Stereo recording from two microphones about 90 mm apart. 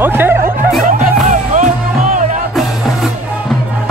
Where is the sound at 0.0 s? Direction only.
25° right (ahead or behind).